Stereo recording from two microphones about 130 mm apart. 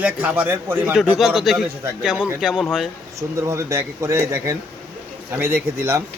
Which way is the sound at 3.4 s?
20° right (ahead or behind).